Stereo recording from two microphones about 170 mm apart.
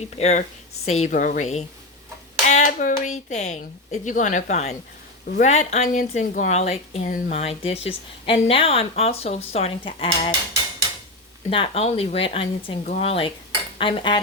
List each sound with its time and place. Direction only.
0.2 s speech: 40° left (ahead or behind)
11.5 s speech: 35° left (ahead or behind)
13.7 s cutlery: 30° left (ahead or behind)